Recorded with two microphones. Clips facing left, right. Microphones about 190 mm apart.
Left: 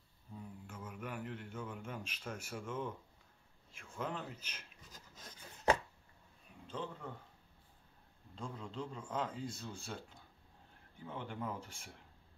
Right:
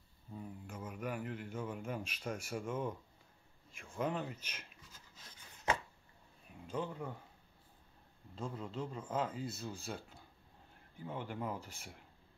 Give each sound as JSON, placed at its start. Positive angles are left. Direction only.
{"t": 0.7, "sound": "a man's voice", "side_deg": -10}
{"t": 4.9, "sound": "chopping", "side_deg": 40}
{"t": 6.7, "sound": "speech", "side_deg": -10}
{"t": 8.4, "sound": "speech", "side_deg": -5}